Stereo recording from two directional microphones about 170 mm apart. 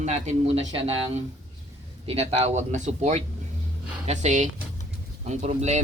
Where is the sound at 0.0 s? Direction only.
40° right (ahead or behind).